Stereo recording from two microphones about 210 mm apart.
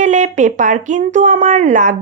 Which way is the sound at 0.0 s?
35° right (ahead or behind).